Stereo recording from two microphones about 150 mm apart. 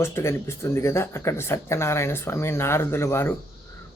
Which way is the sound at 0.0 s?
15° left (ahead or behind).